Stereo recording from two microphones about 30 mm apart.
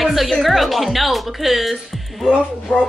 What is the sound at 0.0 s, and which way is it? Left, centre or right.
A woman's voice, centre.